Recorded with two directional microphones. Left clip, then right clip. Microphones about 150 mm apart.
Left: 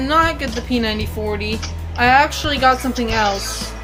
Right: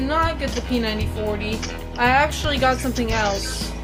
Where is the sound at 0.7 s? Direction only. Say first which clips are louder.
Left 3 dB; 30° left (ahead or behind).